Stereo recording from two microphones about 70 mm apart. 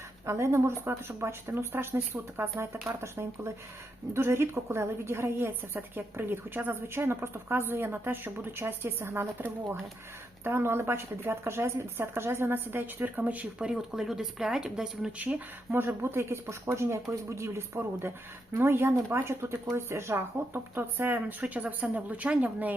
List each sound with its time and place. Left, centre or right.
0.3 s a woman's voice: right; by 15.1 s centre
15.7 s a woman's voice: right